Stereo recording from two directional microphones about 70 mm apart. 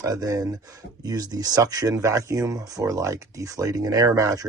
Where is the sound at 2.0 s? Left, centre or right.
Right.